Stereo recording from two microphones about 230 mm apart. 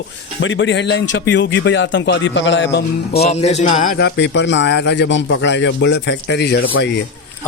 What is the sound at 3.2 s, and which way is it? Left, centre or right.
A man's voice, left.